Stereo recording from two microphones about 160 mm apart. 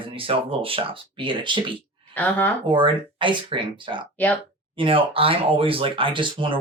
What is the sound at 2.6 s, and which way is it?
Speech, 30° right (ahead or behind).